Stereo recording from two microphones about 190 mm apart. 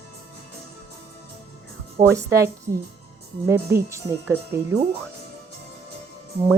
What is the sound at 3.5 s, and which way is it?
Speech, 15° right (ahead or behind).